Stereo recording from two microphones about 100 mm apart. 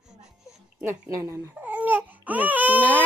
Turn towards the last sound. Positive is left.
turn(degrees=-15)  # may be behind; listen again after turning